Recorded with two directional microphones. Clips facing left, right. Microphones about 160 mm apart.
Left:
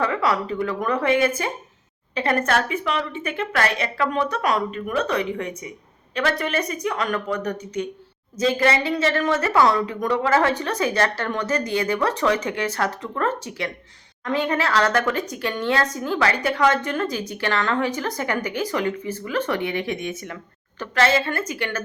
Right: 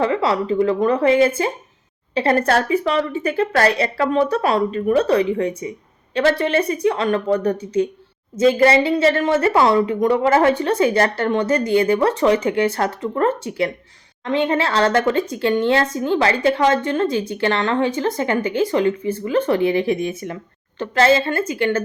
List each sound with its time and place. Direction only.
0.0 s a woman's voice: 25° right (ahead or behind)